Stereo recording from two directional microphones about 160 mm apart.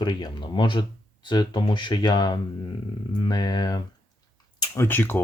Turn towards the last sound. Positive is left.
turn(degrees=15)  # may be behind; listen again after turning